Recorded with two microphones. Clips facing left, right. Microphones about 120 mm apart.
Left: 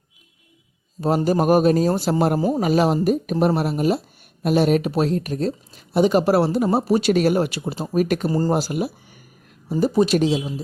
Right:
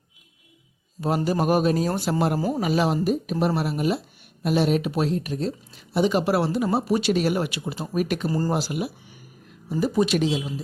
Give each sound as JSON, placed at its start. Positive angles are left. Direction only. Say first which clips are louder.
{"t": 1.0, "sound": "speech", "louder": "left 4 dB", "side_deg": 40}
{"t": 8.3, "sound": "speech", "louder": "left 4 dB", "side_deg": 30}
{"t": 8.5, "sound": "speech", "louder": "left 4 dB", "side_deg": 40}